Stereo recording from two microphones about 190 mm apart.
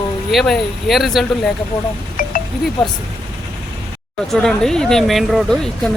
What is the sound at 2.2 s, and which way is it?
Wind chime, 45° left (ahead or behind).